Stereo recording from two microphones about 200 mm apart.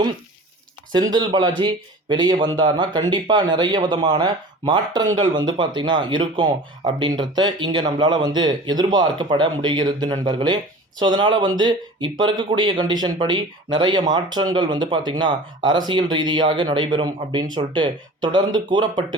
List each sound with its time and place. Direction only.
0.9 s speech: 20° right (ahead or behind)